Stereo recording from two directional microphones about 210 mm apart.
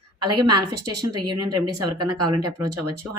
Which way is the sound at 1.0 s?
20° right (ahead or behind).